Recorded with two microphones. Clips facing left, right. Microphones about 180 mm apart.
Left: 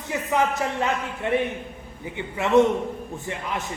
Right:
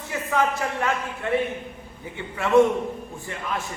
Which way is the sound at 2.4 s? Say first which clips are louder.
Even; 20° left (ahead or behind).